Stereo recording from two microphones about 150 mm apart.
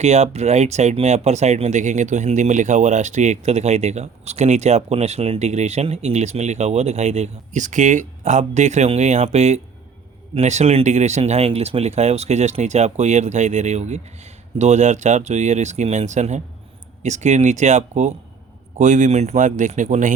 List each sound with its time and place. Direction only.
0.0 s speech: 45° right (ahead or behind)